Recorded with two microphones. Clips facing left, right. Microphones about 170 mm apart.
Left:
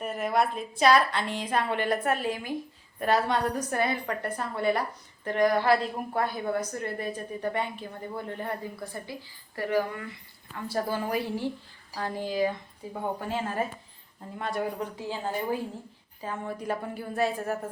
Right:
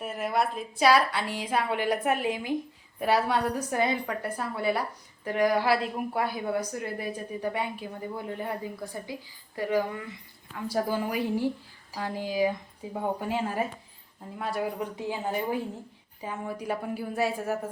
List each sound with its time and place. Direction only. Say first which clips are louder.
0.0 s a woman's voice: left 1 dB; centre (ahead or behind)
14.9 s a woman's voice: right 1 dB; 15° right (ahead or behind)